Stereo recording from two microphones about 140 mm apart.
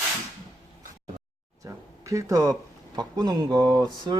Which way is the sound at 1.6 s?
20° right (ahead or behind).